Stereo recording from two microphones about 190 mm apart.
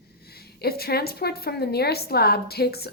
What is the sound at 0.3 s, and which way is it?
A woman's voice, 55° left (ahead or behind).